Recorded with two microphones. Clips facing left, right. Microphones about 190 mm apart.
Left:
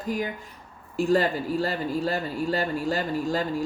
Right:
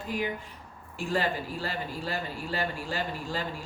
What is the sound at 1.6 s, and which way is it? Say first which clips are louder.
Speech: left 8 dB; 40° left (ahead or behind).